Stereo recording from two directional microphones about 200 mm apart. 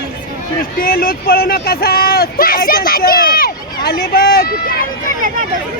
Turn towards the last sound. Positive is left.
turn(degrees=50)  # may be behind; listen again after turning